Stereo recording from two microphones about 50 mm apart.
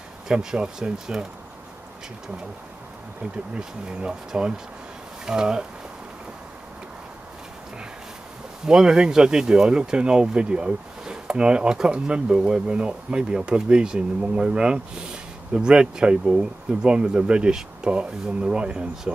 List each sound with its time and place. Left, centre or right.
0.3 s speech: centre
3.2 s speech: centre
8.6 s speech: centre